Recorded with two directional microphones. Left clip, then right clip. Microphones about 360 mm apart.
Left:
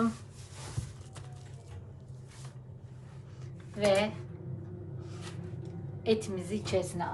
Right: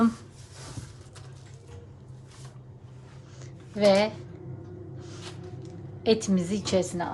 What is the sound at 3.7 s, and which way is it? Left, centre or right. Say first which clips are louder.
Speech: right 6 dB; centre.